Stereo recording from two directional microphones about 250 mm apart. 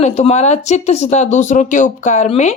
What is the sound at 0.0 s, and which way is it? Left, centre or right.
A woman's voice, left.